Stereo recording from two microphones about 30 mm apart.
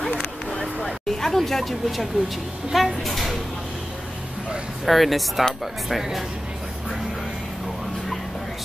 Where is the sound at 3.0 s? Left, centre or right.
Centre.